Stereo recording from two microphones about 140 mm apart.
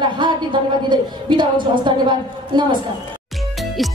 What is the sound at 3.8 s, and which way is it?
Music, centre (ahead or behind).